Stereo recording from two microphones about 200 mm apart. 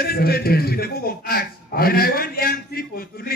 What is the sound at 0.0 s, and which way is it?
A man's voice, 50° left (ahead or behind).